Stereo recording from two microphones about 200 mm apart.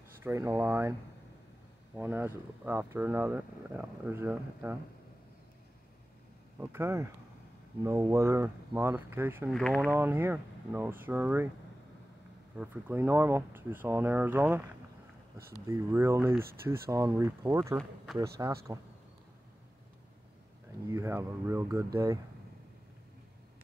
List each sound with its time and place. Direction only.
0.2 s speech: 10° right (ahead or behind)
2.0 s speech: 10° right (ahead or behind)
6.6 s speech: 10° right (ahead or behind)
9.5 s speech: 5° left (ahead or behind)
9.8 s speech: 10° right (ahead or behind)
12.5 s speech: 10° right (ahead or behind)
20.9 s speech: 15° right (ahead or behind)